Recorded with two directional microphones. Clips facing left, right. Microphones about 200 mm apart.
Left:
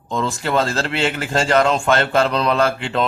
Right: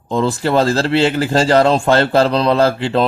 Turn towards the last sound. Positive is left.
turn(degrees=-35)  # may be behind; listen again after turning